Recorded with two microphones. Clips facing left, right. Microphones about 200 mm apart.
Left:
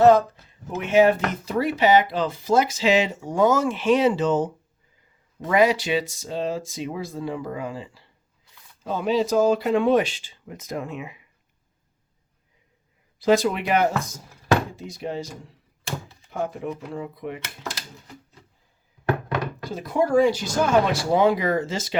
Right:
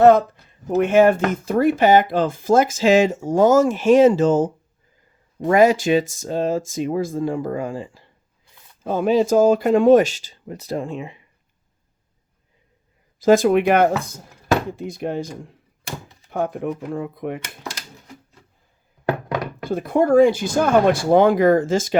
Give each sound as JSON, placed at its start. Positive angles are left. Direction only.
{"t": 0.8, "sound": "speech", "side_deg": -50}
{"t": 13.1, "sound": "speech", "side_deg": -45}
{"t": 16.3, "sound": "speech", "side_deg": -55}
{"t": 19.6, "sound": "speech", "side_deg": -55}